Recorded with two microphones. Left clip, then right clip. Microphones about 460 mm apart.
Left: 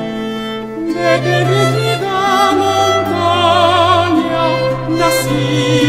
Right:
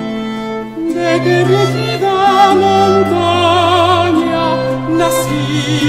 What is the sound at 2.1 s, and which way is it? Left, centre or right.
Music, centre.